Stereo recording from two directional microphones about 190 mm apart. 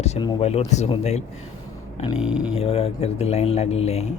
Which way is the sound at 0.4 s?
35° left (ahead or behind).